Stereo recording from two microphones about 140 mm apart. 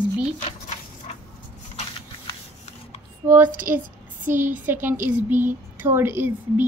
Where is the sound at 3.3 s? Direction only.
15° right (ahead or behind).